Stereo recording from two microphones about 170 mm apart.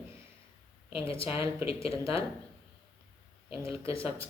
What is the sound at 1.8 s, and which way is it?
Speech, 35° left (ahead or behind).